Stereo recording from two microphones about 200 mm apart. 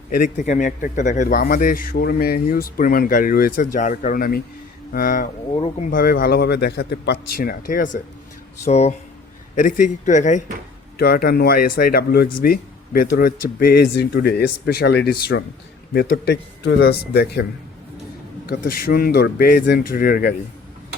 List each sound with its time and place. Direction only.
0.1 s a man's voice: 40° left (ahead or behind)
5.5 s speech: 30° left (ahead or behind)
5.9 s a man's voice: 45° left (ahead or behind)
10.9 s speech: 50° left (ahead or behind)
18.4 s speech: 45° left (ahead or behind)